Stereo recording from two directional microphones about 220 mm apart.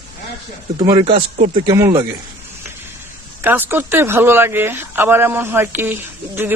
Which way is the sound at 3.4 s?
10° right (ahead or behind).